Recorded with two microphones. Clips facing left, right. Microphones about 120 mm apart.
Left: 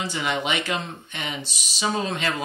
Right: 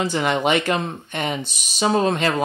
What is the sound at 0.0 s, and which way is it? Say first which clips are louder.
Speech: right 6 dB; 50° right (ahead or behind).